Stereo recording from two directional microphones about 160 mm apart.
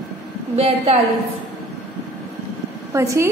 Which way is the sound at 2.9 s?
20° right (ahead or behind).